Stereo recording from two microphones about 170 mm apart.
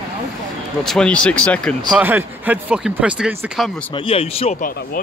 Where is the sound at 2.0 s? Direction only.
10° right (ahead or behind).